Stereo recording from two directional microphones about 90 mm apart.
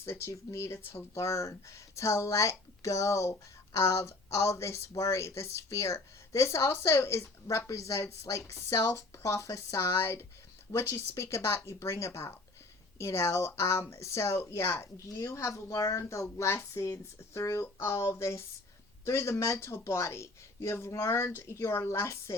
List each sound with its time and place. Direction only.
0.0 s speech: 30° left (ahead or behind)